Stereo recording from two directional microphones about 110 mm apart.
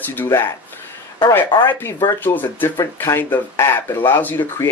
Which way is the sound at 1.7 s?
20° left (ahead or behind).